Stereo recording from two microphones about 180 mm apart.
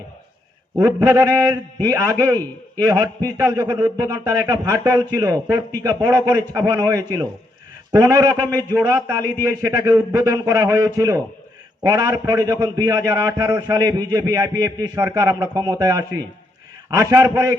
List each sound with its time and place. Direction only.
0.8 s a man's voice: 20° right (ahead or behind)